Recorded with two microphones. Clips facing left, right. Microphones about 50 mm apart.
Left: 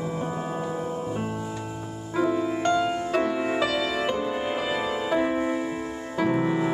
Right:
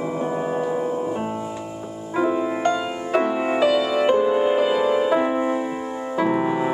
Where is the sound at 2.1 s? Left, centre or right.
Right; by 5.5 s centre.